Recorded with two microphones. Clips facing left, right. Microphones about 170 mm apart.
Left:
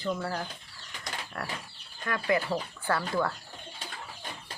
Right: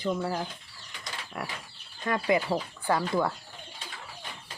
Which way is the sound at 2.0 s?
20° right (ahead or behind).